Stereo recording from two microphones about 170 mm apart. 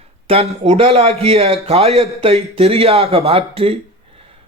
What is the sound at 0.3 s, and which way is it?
A man's voice, 35° right (ahead or behind).